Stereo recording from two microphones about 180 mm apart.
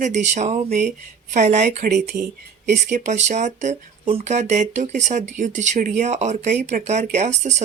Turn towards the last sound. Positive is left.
turn(degrees=-40)  # may be behind; listen again after turning